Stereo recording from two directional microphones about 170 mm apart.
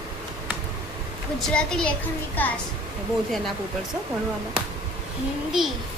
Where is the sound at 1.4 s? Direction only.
5° left (ahead or behind).